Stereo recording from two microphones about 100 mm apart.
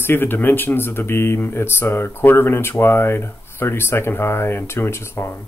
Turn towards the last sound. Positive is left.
turn(degrees=25)  # may be behind; listen again after turning